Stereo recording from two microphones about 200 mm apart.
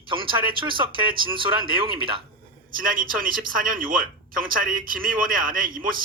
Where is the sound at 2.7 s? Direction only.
45° right (ahead or behind).